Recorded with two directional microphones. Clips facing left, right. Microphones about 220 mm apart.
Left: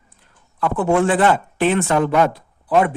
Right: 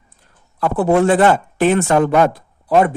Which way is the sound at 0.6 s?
35° right (ahead or behind).